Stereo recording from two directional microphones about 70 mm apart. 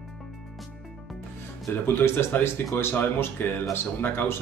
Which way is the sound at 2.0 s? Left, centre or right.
Left.